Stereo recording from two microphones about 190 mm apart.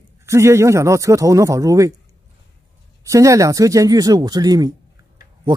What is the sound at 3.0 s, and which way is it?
Speech, 15° right (ahead or behind).